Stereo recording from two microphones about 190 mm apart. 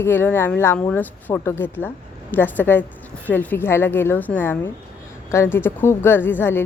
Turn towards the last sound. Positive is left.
turn(degrees=10)  # may be behind; listen again after turning